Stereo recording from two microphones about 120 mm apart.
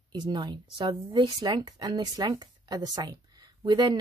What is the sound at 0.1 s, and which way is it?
Speech, 40° right (ahead or behind).